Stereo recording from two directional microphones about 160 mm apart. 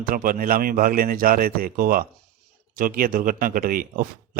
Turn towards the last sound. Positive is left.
turn(degrees=-60)  # may be behind; listen again after turning